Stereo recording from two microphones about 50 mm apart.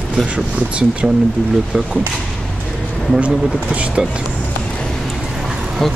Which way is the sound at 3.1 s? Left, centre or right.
Right.